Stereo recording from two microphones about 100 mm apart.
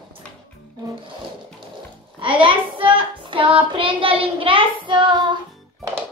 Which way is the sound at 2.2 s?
60° right (ahead or behind).